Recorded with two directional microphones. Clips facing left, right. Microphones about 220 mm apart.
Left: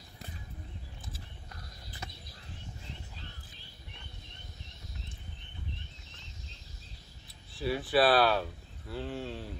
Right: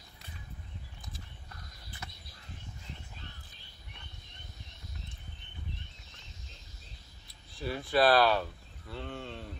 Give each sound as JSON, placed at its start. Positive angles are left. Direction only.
{"t": 7.5, "sound": "speech", "side_deg": 0}